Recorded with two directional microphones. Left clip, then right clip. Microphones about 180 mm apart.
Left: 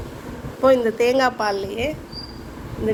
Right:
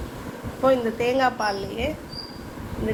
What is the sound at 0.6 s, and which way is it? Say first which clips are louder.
A woman's voice: left 5 dB; 65° left (ahead or behind).